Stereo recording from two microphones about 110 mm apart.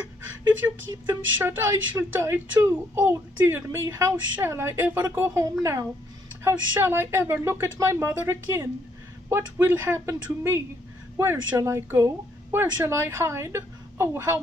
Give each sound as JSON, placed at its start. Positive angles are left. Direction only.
{"t": 1.4, "sound": "a child's voice", "side_deg": -25}